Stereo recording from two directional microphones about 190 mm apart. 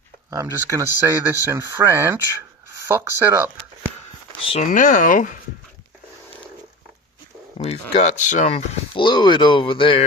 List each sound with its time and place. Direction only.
0.3 s speech: 15° right (ahead or behind)
4.5 s speech: 45° left (ahead or behind)
7.6 s speech: 35° left (ahead or behind)
8.9 s speech: 25° left (ahead or behind)